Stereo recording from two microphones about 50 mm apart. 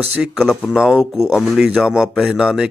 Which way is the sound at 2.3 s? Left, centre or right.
Centre.